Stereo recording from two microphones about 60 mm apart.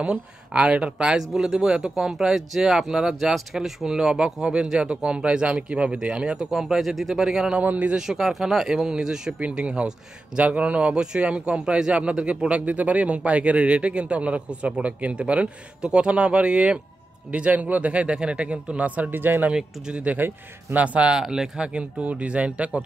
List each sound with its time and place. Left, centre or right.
0.0 s a man's voice: centre
7.5 s a man's voice: right
8.0 s a man's voice: centre; by 19.5 s right
19.5 s speech: centre
20.2 s a man's voice: right
20.8 s a man's voice: right
21.2 s a man's voice: centre